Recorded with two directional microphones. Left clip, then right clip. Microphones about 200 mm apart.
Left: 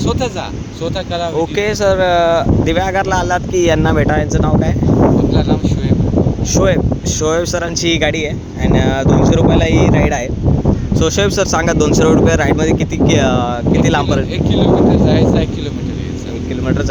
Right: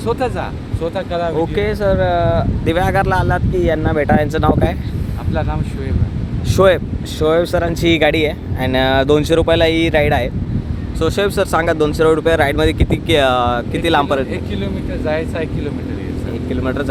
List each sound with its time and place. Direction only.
1.4 s speech: 10° left (ahead or behind)
2.6 s speech: 5° left (ahead or behind); by 4.0 s 20° left (ahead or behind)
4.1 s speech: 15° right (ahead or behind)
6.5 s speech: 20° right (ahead or behind)
7.2 s speech: 10° right (ahead or behind)
11.0 s speech: 5° left (ahead or behind)
12.1 s speech: 5° right (ahead or behind)
15.0 s speech: centre (ahead or behind)